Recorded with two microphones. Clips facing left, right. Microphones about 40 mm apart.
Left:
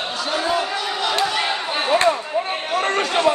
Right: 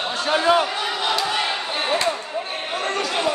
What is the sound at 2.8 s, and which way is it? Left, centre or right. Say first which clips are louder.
Chatter: left 3 dB; left.